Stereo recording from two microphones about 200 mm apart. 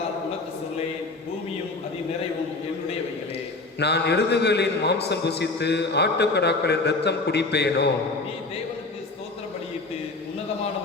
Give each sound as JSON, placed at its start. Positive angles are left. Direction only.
{"t": 3.8, "sound": "a man's voice", "side_deg": 55}